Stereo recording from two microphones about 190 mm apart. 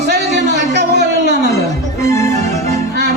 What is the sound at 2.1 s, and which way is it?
Music, 15° left (ahead or behind).